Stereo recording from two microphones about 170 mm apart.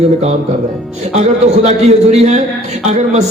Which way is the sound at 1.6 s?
40° right (ahead or behind).